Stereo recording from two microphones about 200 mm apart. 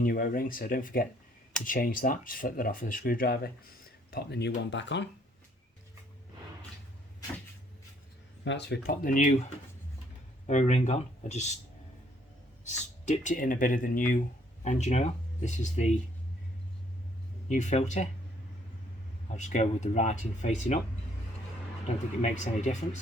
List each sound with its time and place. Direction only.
0.0 s speech: 45° left (ahead or behind); by 5.0 s 65° left (ahead or behind)
8.4 s speech: 60° left (ahead or behind); by 9.3 s 40° left (ahead or behind)
10.4 s speech: 35° left (ahead or behind)
12.6 s speech: 40° left (ahead or behind)
17.5 s speech: 35° left (ahead or behind)
19.3 s speech: 35° left (ahead or behind)
21.8 s speech: 35° left (ahead or behind)